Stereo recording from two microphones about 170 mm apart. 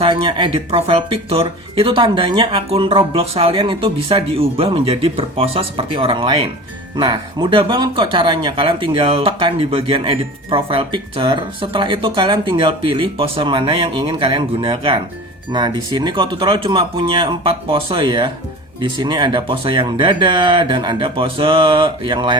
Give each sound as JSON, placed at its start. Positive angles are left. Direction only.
{"t": 0.0, "sound": "speech", "side_deg": -30}